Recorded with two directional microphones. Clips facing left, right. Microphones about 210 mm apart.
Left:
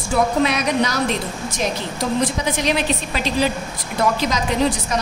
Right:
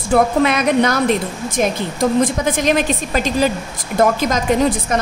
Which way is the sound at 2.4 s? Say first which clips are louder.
Right 4 dB; 50° right (ahead or behind).